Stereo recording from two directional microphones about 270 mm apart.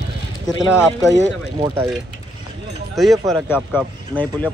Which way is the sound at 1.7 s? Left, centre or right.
Centre.